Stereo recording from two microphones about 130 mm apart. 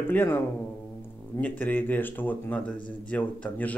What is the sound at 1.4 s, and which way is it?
Speech, 15° left (ahead or behind).